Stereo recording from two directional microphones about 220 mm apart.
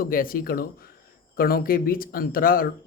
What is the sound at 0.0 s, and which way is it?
Speech, 40° left (ahead or behind).